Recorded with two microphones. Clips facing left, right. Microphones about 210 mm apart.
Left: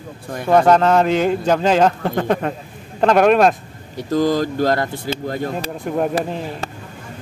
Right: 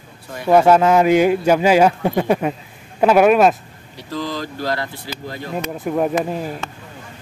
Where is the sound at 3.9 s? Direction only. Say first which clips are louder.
Left 9 dB; 45° left (ahead or behind).